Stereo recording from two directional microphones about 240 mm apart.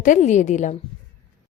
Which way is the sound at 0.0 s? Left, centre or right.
Left.